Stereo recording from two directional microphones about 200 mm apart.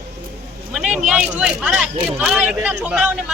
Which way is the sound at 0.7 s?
5° right (ahead or behind).